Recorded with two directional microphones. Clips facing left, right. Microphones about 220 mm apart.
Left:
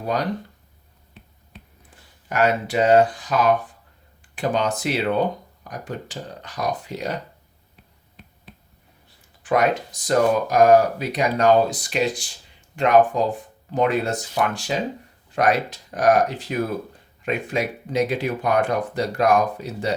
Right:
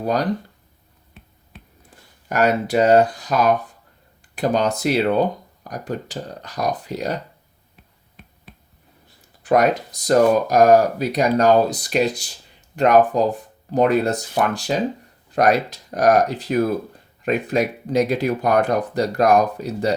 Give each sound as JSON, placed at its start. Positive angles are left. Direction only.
{"t": 1.9, "sound": "speech", "side_deg": -40}
{"t": 9.4, "sound": "a sound", "side_deg": -40}
{"t": 10.1, "sound": "speech", "side_deg": -40}